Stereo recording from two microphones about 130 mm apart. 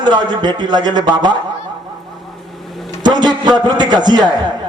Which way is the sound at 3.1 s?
35° right (ahead or behind).